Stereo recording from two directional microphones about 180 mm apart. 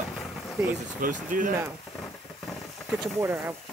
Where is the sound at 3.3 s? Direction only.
5° right (ahead or behind).